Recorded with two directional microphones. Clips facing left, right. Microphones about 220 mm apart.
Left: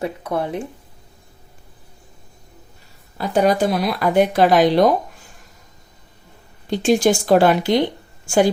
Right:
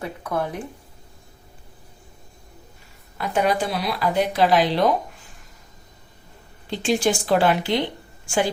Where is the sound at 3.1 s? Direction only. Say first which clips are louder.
Left 5 dB; 35° left (ahead or behind).